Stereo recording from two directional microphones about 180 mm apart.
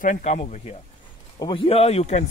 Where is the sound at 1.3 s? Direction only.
25° left (ahead or behind).